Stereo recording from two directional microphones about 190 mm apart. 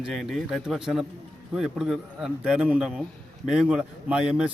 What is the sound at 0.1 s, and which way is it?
A man's voice, centre (ahead or behind).